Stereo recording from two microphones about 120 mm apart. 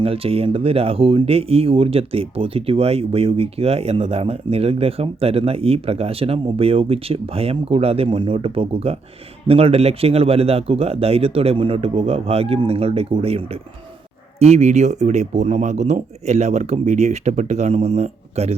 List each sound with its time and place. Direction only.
0.0 s speech: 50° right (ahead or behind)